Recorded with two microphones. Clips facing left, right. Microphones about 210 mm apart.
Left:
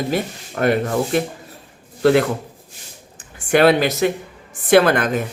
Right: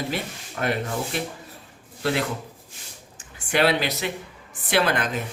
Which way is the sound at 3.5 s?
50° left (ahead or behind).